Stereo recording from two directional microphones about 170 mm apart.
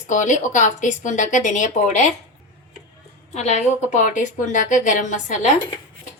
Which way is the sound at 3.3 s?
40° left (ahead or behind).